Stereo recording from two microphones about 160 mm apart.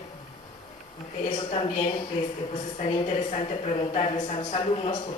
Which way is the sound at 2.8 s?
35° left (ahead or behind).